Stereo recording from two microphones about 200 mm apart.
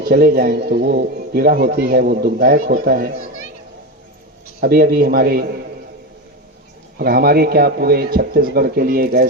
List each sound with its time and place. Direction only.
0.0 s a man's voice: 50° right (ahead or behind)
4.6 s a man's voice: 50° right (ahead or behind)
7.0 s a man's voice: 50° right (ahead or behind)